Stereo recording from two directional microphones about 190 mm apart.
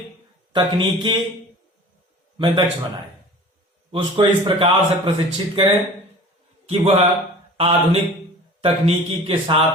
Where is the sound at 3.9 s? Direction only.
25° right (ahead or behind).